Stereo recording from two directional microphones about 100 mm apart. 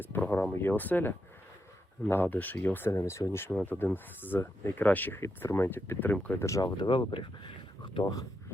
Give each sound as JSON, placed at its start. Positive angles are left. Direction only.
{"t": 0.0, "sound": "a sound", "side_deg": 20}
{"t": 0.6, "sound": "speech", "side_deg": 20}
{"t": 2.9, "sound": "speech", "side_deg": 30}
{"t": 6.4, "sound": "speech", "side_deg": 30}
{"t": 6.7, "sound": "speech", "side_deg": 55}